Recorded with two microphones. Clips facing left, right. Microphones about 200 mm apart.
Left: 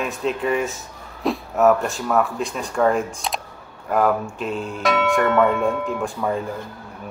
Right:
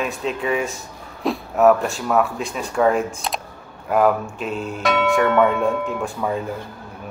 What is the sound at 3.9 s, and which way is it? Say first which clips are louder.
Speech: right 2 dB; 5° right (ahead or behind).